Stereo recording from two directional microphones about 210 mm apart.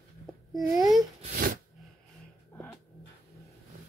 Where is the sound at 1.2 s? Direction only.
40° right (ahead or behind).